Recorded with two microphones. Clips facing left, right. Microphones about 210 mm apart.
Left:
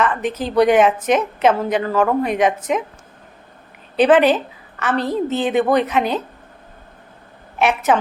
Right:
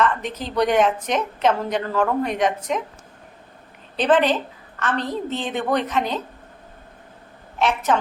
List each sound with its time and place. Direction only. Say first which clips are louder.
0.0 s a woman's voice: left 3 dB; 10° left (ahead or behind)
3.9 s a woman's voice: left 5 dB; 10° left (ahead or behind)
7.6 s a woman's voice: left 4 dB; 10° left (ahead or behind)